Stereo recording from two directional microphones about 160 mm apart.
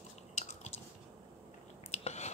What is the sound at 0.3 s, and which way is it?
Biting, 45° left (ahead or behind).